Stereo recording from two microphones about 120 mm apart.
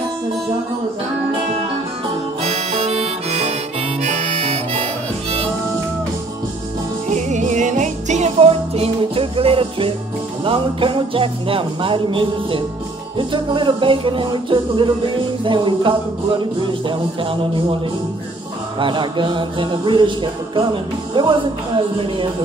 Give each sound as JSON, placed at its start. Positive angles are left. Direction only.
{"t": 2.4, "sound": "harmonica", "side_deg": -60}
{"t": 7.1, "sound": "music", "side_deg": -85}
{"t": 18.8, "sound": "music", "side_deg": -40}